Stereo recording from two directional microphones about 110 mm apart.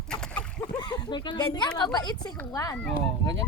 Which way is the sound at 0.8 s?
40° left (ahead or behind).